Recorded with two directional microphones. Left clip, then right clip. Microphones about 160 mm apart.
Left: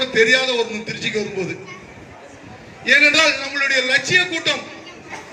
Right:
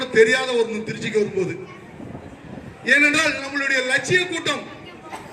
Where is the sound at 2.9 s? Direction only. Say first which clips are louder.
Left 3 dB; 85° right.